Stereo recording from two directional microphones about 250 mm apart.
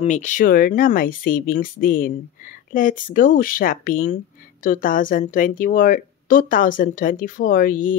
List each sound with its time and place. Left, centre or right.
0.0 s a woman's voice: left